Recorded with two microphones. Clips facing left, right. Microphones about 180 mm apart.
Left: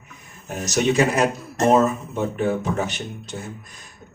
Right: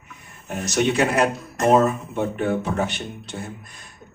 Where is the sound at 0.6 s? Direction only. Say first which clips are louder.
Left 1 dB; 40° left (ahead or behind).